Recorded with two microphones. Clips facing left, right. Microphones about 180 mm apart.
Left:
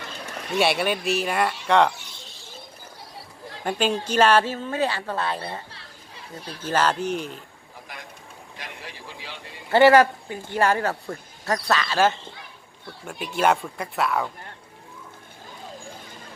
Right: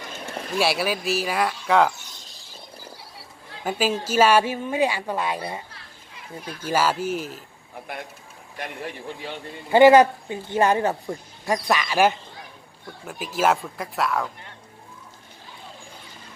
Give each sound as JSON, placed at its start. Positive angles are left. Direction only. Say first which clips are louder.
{"t": 0.6, "sound": "speech", "louder": "left 1 dB", "side_deg": 0}
{"t": 2.0, "sound": "bird", "louder": "left 2 dB", "side_deg": -40}
{"t": 3.6, "sound": "a woman's voice", "louder": "even", "side_deg": -5}
{"t": 5.7, "sound": "children playing", "louder": "left 1 dB", "side_deg": 30}
{"t": 6.6, "sound": "a woman's voice", "louder": "even", "side_deg": -10}
{"t": 8.5, "sound": "speech", "louder": "right 8 dB", "side_deg": -55}
{"t": 9.6, "sound": "a woman's voice", "louder": "right 2 dB", "side_deg": -15}
{"t": 13.1, "sound": "speech", "louder": "even", "side_deg": 0}